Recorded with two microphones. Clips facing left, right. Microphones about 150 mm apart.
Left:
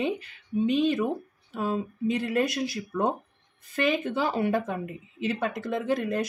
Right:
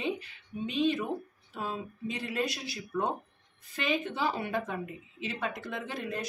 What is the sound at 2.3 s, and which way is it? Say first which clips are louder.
Speech: left 7 dB; 50° left (ahead or behind).